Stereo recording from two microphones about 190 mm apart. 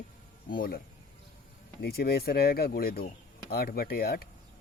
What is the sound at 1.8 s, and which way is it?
Speech, 55° left (ahead or behind).